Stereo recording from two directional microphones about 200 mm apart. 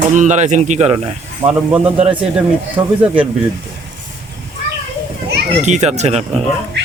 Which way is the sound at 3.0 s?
5° right (ahead or behind).